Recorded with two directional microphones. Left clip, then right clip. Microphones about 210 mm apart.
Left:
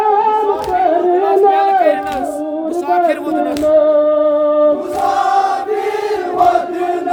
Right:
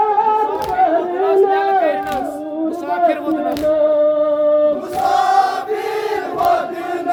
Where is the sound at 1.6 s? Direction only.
35° left (ahead or behind).